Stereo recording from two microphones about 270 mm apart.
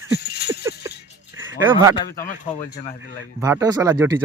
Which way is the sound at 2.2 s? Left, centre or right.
Left.